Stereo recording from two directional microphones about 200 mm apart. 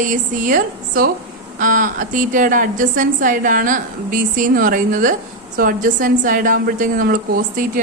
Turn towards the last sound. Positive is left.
turn(degrees=-45)  # may be behind; listen again after turning